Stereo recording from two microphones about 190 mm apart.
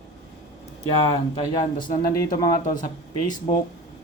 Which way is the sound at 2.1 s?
20° left (ahead or behind).